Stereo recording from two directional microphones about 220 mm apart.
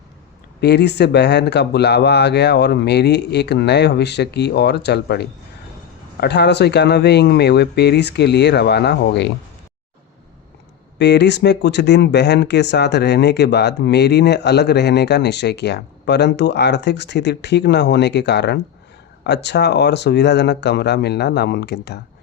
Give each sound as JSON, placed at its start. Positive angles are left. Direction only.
{"t": 0.6, "sound": "speech", "side_deg": 50}
{"t": 10.9, "sound": "speech", "side_deg": 50}